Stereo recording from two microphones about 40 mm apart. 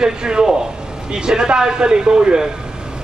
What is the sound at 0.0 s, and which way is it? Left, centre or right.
Speech, centre.